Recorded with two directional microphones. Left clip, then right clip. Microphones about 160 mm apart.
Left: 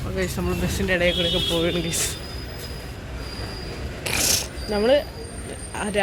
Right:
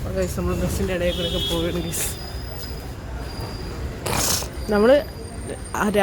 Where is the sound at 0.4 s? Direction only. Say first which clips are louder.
Right 1 dB; centre (ahead or behind).